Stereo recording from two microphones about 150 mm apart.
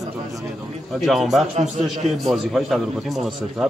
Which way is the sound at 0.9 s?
Centre (ahead or behind).